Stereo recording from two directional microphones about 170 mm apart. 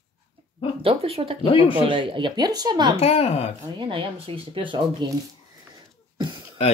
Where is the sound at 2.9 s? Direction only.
35° left (ahead or behind).